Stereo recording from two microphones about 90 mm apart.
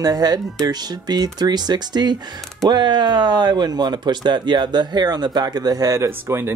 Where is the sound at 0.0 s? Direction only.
45° right (ahead or behind).